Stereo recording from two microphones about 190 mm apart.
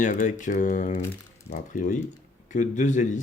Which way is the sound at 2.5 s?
40° left (ahead or behind).